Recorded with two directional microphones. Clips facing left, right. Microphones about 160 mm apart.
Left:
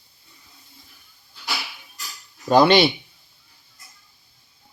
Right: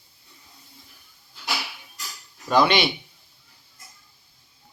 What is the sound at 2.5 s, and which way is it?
Speech, 30° left (ahead or behind).